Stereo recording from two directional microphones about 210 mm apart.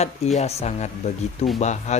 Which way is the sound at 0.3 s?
30° left (ahead or behind).